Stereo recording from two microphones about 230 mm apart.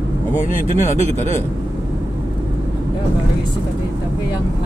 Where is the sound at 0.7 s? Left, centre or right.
Left.